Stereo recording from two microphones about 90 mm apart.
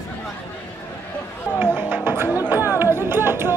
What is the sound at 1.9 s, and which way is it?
Music, 25° right (ahead or behind).